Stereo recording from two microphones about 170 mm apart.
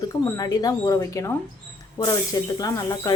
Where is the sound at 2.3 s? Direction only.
25° left (ahead or behind).